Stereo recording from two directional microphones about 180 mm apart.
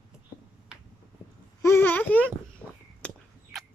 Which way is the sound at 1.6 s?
15° left (ahead or behind).